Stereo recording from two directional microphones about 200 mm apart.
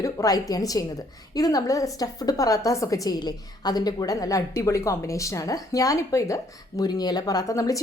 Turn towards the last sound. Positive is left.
turn(degrees=15)  # may be behind; listen again after turning